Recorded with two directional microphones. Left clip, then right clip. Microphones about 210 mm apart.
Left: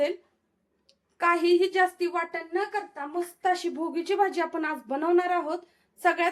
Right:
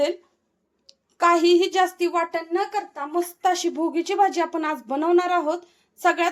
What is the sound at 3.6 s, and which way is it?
Speech, 25° right (ahead or behind).